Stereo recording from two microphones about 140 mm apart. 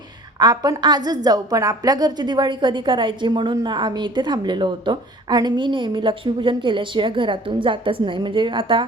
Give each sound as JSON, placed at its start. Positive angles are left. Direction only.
{"t": 0.3, "sound": "a woman's voice", "side_deg": -30}